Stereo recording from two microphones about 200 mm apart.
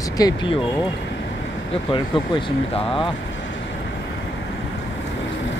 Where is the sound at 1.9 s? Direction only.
25° left (ahead or behind).